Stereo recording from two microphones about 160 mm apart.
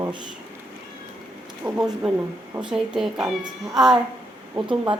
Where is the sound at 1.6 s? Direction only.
5° right (ahead or behind).